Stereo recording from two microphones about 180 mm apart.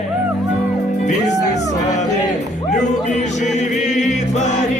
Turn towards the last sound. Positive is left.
turn(degrees=40)  # may be behind; listen again after turning